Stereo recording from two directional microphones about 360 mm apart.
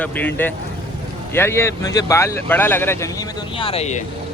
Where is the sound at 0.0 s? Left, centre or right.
Centre.